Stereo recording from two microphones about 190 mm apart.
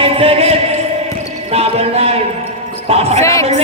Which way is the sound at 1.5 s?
30° right (ahead or behind).